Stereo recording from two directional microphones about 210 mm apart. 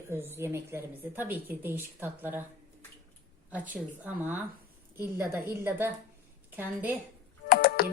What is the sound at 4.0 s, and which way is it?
A woman's voice, 10° right (ahead or behind).